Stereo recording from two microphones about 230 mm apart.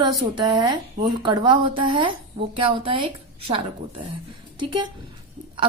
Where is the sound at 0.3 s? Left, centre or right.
Centre.